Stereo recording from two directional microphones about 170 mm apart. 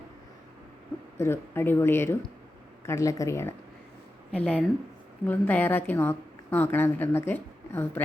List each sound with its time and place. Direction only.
1.2 s a woman's voice: 15° left (ahead or behind)